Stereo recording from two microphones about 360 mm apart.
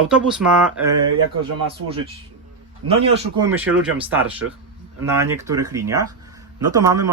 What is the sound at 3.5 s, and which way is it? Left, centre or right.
Speech, centre.